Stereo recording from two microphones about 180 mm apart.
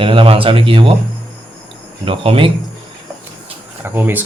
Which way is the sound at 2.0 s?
30° right (ahead or behind).